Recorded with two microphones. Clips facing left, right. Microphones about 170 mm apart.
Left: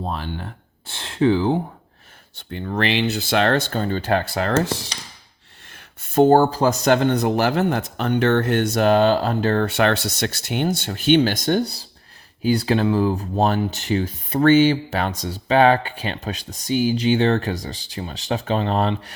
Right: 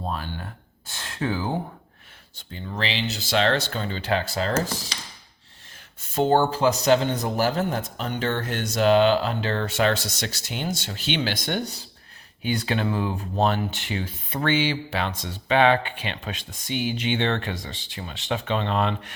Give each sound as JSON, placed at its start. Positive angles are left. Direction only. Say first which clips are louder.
{"t": 0.1, "sound": "speech", "louder": "left 3 dB", "side_deg": 25}
{"t": 2.3, "sound": "speech", "louder": "left 8 dB", "side_deg": 60}
{"t": 4.6, "sound": "speech", "louder": "left 5 dB", "side_deg": 70}
{"t": 5.7, "sound": "speech", "louder": "left 8 dB", "side_deg": 55}
{"t": 6.8, "sound": "speech", "louder": "left 3 dB", "side_deg": 55}